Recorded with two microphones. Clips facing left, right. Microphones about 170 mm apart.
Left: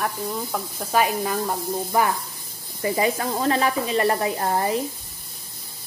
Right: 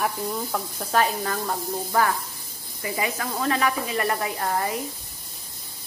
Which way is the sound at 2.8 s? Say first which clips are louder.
Left 6 dB; 35° left (ahead or behind).